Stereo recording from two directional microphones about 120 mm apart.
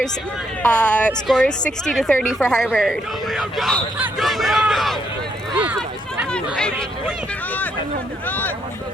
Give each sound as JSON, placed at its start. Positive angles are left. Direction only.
{"t": 0.7, "sound": "speech", "side_deg": 10}
{"t": 6.3, "sound": "speech", "side_deg": 5}
{"t": 8.3, "sound": "speech", "side_deg": 15}